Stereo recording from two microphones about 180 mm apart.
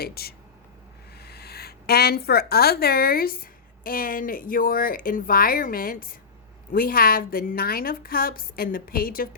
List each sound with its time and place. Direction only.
0.0 s a woman's voice: 60° left (ahead or behind)